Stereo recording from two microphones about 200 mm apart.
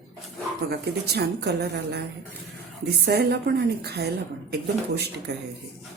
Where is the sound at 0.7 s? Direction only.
55° right (ahead or behind).